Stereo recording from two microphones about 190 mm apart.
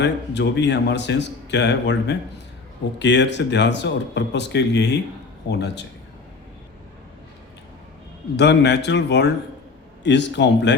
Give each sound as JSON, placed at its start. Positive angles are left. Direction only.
{"t": 0.0, "sound": "a man's voice", "side_deg": 65}
{"t": 8.4, "sound": "a man's voice", "side_deg": 65}